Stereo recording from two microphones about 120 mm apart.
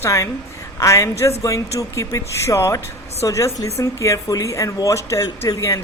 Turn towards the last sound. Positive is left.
turn(degrees=25)  # may be behind; listen again after turning